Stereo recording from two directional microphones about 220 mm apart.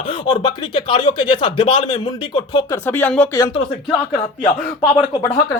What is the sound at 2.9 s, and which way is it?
Speech, 10° left (ahead or behind).